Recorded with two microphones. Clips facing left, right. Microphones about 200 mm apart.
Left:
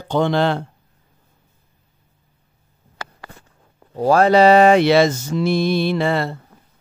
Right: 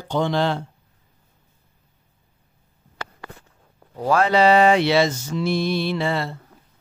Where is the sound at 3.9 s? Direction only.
35° left (ahead or behind); by 6.4 s 55° left (ahead or behind).